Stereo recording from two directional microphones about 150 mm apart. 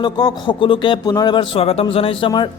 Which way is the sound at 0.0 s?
30° left (ahead or behind).